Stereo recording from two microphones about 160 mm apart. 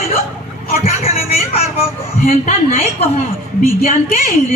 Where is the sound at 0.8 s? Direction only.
40° left (ahead or behind).